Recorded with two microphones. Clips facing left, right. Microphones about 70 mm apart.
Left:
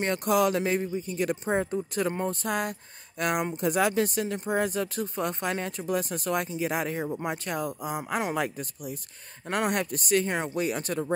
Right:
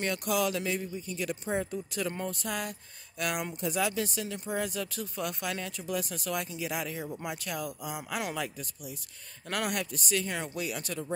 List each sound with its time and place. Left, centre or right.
0.0 s speech: left
9.5 s speech: left